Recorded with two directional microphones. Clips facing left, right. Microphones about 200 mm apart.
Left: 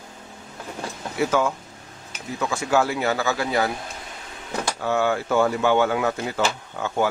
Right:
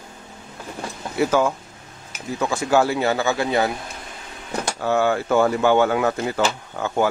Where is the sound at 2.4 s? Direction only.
35° right (ahead or behind).